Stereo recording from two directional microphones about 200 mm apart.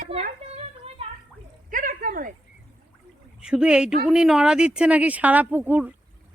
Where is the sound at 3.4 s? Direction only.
5° right (ahead or behind).